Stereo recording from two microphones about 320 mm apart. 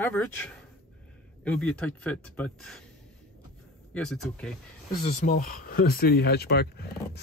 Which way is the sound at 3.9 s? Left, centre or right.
Centre.